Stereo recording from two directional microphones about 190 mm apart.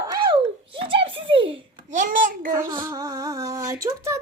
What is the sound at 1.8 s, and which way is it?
Speech, 45° right (ahead or behind).